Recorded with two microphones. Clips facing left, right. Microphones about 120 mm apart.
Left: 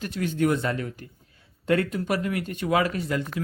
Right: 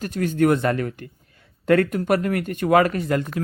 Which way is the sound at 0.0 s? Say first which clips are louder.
Right 5 dB; 45° right (ahead or behind).